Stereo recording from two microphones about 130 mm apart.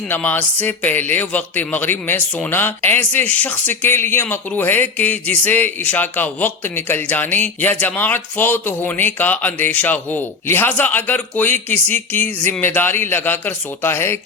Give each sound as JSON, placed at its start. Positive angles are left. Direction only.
{"t": 0.1, "sound": "speech", "side_deg": 10}